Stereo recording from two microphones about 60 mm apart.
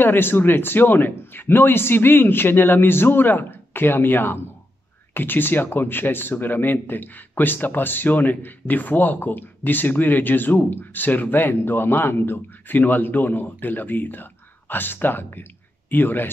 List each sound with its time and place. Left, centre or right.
0.0 s speech: left